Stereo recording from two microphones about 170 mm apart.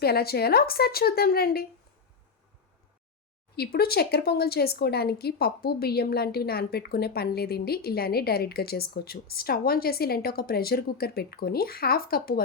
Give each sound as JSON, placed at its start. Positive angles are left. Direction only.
{"t": 0.0, "sound": "speech", "side_deg": 65}
{"t": 3.5, "sound": "speech", "side_deg": 65}